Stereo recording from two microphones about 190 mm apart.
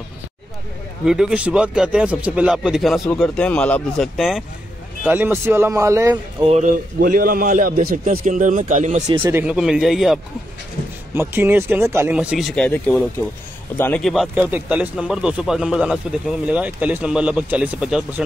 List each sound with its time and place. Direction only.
1.0 s speech: 5° right (ahead or behind)
6.4 s speech: 25° right (ahead or behind)
7.0 s a man's voice: 50° right (ahead or behind)
9.2 s speech: 10° right (ahead or behind)
11.1 s speech: 10° right (ahead or behind)